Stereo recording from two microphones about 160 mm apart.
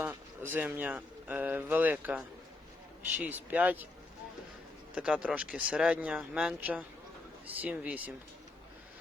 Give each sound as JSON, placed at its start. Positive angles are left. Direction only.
{"t": 0.0, "sound": "speech", "side_deg": -10}
{"t": 4.9, "sound": "speech", "side_deg": -5}